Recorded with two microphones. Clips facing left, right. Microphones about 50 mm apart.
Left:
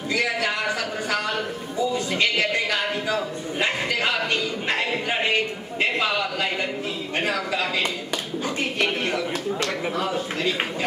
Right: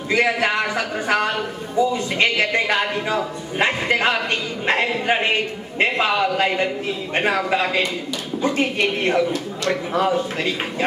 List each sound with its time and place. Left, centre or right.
0.1 s a man's voice: right